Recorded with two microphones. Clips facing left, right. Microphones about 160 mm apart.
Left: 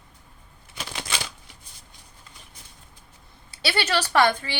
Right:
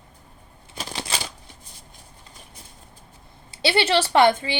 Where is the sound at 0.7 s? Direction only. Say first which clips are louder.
Right 2 dB; 35° right (ahead or behind).